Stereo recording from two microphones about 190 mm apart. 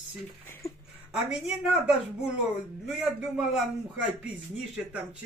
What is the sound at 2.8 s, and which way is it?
A man's voice, centre (ahead or behind).